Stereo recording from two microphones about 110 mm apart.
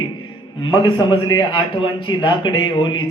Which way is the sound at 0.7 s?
45° left (ahead or behind).